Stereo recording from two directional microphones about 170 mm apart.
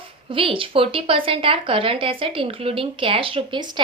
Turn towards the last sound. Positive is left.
turn(degrees=-25)  # may be behind; listen again after turning